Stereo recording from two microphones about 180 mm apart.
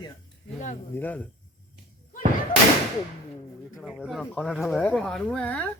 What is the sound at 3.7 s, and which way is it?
Speech, centre (ahead or behind).